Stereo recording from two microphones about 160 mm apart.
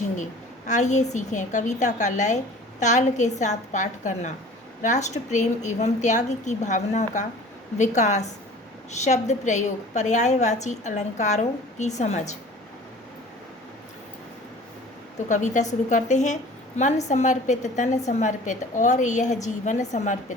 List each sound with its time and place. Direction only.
0.7 s a woman's voice: 50° left (ahead or behind)
15.3 s a woman's voice: 50° left (ahead or behind)